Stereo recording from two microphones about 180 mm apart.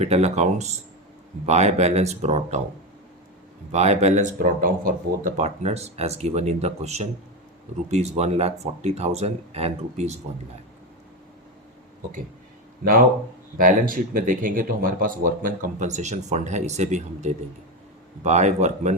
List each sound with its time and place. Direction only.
0.0 s speech: 35° right (ahead or behind)
3.7 s speech: 35° right (ahead or behind)
12.8 s speech: 50° right (ahead or behind)